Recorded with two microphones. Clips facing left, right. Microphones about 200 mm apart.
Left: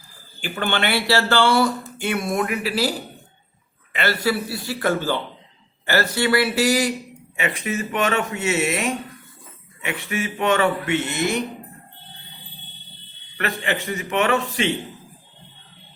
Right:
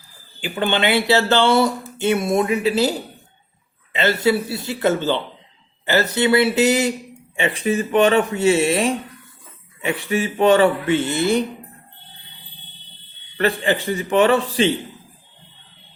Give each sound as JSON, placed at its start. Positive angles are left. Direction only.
{"t": 0.4, "sound": "speech", "side_deg": -20}
{"t": 13.3, "sound": "speech", "side_deg": -30}